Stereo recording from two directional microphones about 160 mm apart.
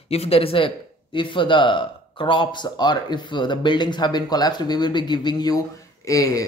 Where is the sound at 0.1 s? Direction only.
40° left (ahead or behind).